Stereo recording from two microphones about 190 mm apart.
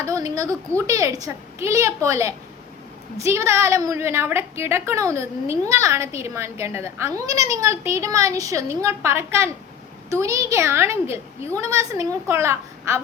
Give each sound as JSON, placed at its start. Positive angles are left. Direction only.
{"t": 0.0, "sound": "a woman's voice", "side_deg": -15}